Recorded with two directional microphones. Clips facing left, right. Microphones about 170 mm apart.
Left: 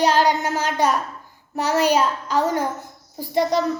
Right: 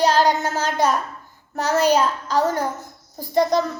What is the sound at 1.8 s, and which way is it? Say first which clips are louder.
Child singing: right 1 dB; 40° right (ahead or behind).